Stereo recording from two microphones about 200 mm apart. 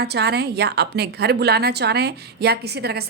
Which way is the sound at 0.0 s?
55° right (ahead or behind).